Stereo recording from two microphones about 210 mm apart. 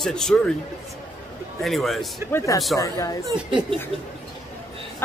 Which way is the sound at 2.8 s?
15° left (ahead or behind).